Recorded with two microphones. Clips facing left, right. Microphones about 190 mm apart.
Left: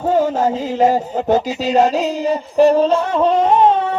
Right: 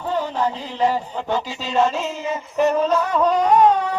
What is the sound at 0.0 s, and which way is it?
Music, 45° left (ahead or behind).